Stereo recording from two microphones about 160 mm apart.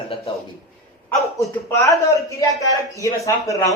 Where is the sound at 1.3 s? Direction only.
20° left (ahead or behind).